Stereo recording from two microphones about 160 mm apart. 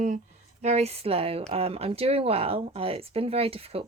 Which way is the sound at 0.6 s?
40° right (ahead or behind).